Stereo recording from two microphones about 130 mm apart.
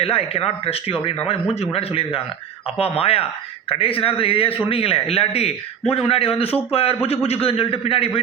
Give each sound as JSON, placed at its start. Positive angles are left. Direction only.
{"t": 0.0, "sound": "a man's voice", "side_deg": 50}